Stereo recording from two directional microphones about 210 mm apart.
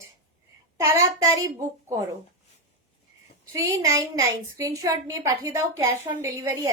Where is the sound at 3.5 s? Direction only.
15° right (ahead or behind).